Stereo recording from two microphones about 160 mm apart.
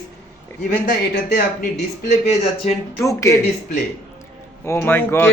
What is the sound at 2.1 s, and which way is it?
Speech, 45° left (ahead or behind).